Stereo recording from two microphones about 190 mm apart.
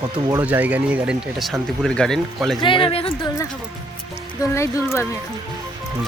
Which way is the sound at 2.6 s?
25° left (ahead or behind).